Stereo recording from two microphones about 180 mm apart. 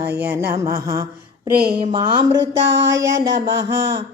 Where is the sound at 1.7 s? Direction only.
25° right (ahead or behind).